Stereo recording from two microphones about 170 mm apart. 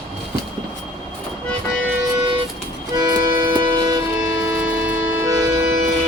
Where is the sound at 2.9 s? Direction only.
20° right (ahead or behind).